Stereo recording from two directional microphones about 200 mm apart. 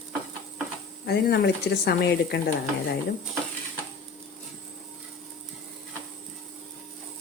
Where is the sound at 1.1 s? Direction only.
55° left (ahead or behind).